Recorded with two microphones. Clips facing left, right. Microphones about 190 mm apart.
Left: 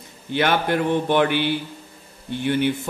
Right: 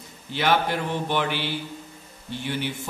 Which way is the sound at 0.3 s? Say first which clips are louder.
Left 3 dB; 55° left (ahead or behind).